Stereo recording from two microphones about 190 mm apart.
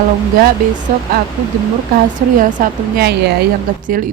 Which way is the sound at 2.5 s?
50° right (ahead or behind).